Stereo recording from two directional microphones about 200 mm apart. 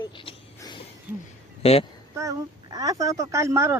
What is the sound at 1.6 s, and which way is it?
Speech, 30° left (ahead or behind).